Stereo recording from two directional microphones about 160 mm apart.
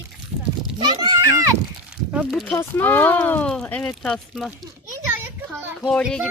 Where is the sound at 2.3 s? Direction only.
5° left (ahead or behind).